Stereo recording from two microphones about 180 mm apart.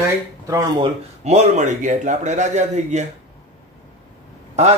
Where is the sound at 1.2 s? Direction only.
40° right (ahead or behind).